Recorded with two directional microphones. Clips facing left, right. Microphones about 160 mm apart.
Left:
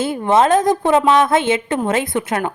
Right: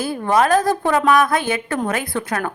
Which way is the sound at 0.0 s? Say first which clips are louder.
Left 3 dB; 25° left (ahead or behind).